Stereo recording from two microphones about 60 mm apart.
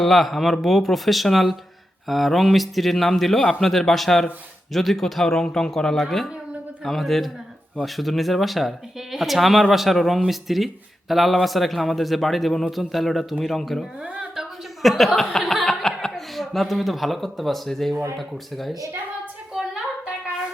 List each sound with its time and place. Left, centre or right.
0.0 s a man's voice: centre
14.0 s a sound: centre
14.8 s a man's voice: centre